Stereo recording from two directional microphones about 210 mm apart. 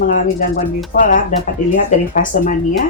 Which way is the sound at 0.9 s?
40° left (ahead or behind).